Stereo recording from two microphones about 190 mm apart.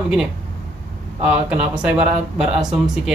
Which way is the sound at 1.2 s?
5° right (ahead or behind).